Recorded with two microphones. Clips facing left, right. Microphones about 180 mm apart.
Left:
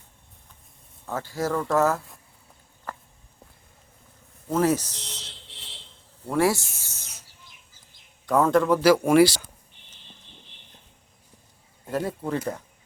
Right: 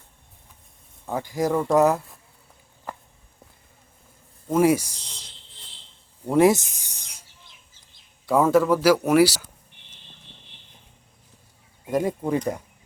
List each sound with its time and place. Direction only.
1.0 s speech: 15° right (ahead or behind)
2.9 s walk: 15° right (ahead or behind)
4.4 s speech: 10° right (ahead or behind)
5.5 s a sound: 75° left (ahead or behind)
6.2 s speech: 20° right (ahead or behind)
8.3 s speech: 10° right (ahead or behind)
11.9 s speech: 15° right (ahead or behind)